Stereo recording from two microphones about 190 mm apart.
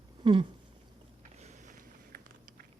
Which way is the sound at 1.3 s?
40° right (ahead or behind).